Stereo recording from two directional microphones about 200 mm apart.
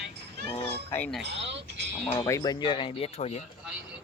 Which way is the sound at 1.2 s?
60° right (ahead or behind).